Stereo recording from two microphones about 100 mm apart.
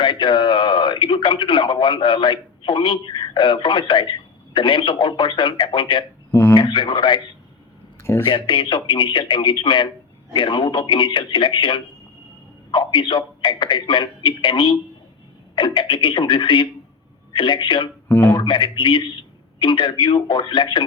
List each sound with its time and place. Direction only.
0.0 s speech: 50° left (ahead or behind)
6.3 s speech: 25° left (ahead or behind)
6.6 s speech: 55° left (ahead or behind)
8.2 s speech: 55° left (ahead or behind)